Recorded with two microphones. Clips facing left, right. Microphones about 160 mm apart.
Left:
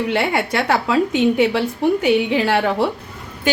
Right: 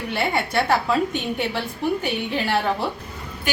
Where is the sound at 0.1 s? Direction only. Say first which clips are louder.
Left 4 dB; 85° left.